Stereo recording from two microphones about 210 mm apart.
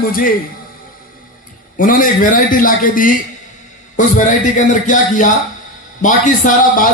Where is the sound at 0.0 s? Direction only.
40° left (ahead or behind).